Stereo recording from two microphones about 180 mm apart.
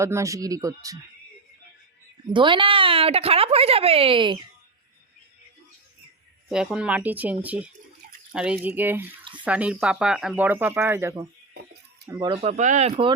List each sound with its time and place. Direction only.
0.0 s speech: 15° right (ahead or behind)
2.3 s a woman's voice: 25° right (ahead or behind)
6.5 s speech: 5° right (ahead or behind)
12.4 s a woman's voice: 40° right (ahead or behind)